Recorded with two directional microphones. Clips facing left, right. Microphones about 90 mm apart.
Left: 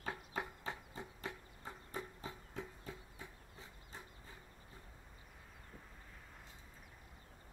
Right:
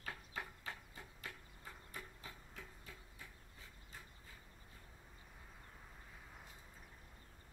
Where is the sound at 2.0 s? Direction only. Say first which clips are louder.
Left 8 dB; 25° left (ahead or behind).